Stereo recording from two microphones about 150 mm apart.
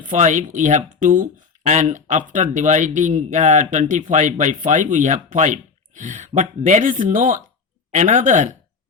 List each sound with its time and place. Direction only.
0.0 s speech: 55° right (ahead or behind)